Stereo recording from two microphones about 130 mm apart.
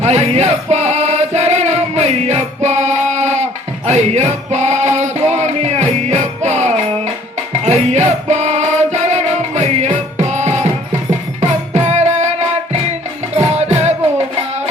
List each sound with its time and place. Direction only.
0.0 s music: 60° right (ahead or behind)
13.6 s music: 60° right (ahead or behind)